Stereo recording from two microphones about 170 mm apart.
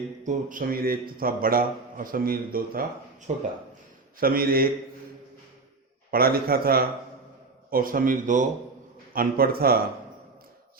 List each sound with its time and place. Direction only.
0.3 s a man's voice: 50° right (ahead or behind)
6.1 s a man's voice: 60° right (ahead or behind)
9.1 s a man's voice: 60° right (ahead or behind)